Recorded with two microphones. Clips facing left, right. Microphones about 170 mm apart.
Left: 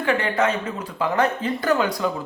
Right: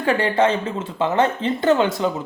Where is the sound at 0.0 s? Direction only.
35° right (ahead or behind).